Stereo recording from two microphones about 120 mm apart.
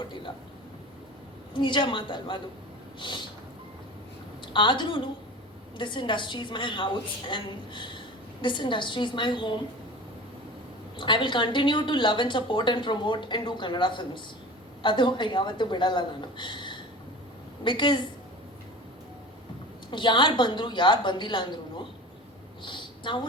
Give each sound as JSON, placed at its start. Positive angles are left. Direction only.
{"t": 1.5, "sound": "a woman's voice", "side_deg": 40}
{"t": 4.5, "sound": "a woman's voice", "side_deg": 40}
{"t": 10.9, "sound": "a woman's voice", "side_deg": 40}
{"t": 19.9, "sound": "a woman's voice", "side_deg": 40}